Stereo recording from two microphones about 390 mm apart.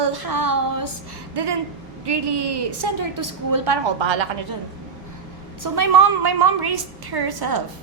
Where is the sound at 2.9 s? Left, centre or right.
Right.